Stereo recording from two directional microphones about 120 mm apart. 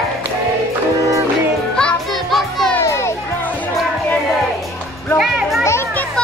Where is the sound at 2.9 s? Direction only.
25° left (ahead or behind).